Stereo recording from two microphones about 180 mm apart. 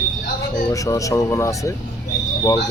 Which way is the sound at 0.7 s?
20° left (ahead or behind).